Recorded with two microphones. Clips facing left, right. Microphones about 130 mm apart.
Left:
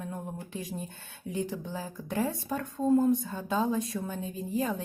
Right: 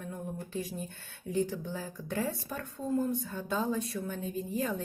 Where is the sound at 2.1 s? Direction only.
15° left (ahead or behind).